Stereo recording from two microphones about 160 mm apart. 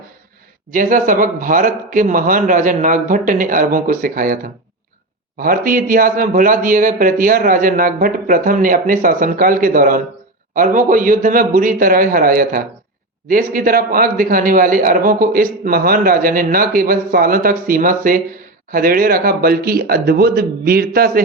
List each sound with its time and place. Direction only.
0.7 s a man's voice: 55° right (ahead or behind)
5.4 s a man's voice: 60° right (ahead or behind)